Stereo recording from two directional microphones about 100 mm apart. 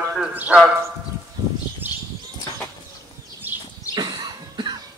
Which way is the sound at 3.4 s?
20° right (ahead or behind).